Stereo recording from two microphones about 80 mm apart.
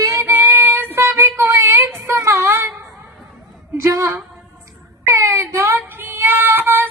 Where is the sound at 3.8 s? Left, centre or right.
Right.